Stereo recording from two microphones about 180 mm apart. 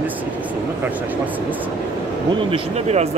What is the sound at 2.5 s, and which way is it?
Speech, 35° right (ahead or behind).